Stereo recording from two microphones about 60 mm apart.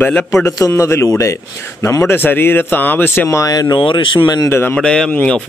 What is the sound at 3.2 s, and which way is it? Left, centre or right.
Speech, left.